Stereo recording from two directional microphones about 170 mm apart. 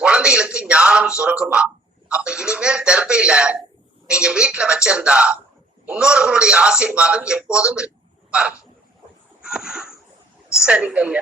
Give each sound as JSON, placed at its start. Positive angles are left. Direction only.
{"t": 0.0, "sound": "a man's voice", "side_deg": -5}
{"t": 9.4, "sound": "a sound", "side_deg": -5}
{"t": 10.6, "sound": "speech", "side_deg": -5}